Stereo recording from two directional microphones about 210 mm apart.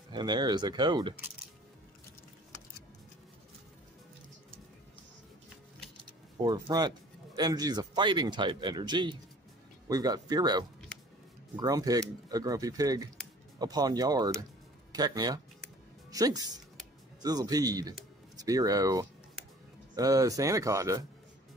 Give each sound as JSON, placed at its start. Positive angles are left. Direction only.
{"t": 0.1, "sound": "speech", "side_deg": -20}
{"t": 6.4, "sound": "speech", "side_deg": -20}